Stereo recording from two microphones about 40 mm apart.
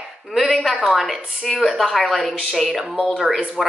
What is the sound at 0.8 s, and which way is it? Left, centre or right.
Speech, centre.